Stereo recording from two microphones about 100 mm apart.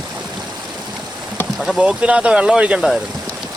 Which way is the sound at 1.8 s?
10° right (ahead or behind).